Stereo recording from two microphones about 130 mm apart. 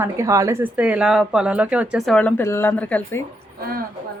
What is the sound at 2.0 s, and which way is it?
Speech, 5° left (ahead or behind).